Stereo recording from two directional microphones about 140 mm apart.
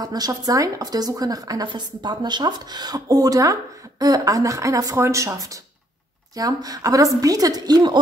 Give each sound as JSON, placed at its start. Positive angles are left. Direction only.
{"t": 0.0, "sound": "a woman's voice", "side_deg": -30}